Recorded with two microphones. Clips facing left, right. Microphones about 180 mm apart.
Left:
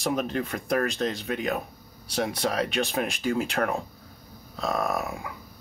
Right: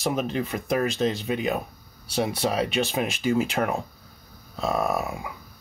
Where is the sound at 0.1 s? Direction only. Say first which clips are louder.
Right 1 dB; 20° right (ahead or behind).